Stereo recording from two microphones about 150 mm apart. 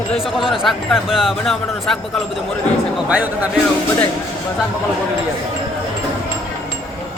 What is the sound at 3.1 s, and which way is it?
Speech, 10° right (ahead or behind).